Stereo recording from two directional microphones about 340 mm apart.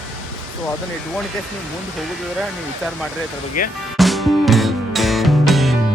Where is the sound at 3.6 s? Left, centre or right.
Left.